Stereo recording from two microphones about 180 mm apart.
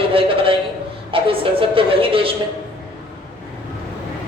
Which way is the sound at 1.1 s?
30° right (ahead or behind).